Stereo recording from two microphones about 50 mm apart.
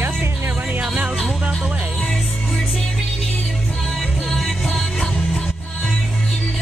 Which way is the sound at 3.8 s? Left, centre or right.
Centre.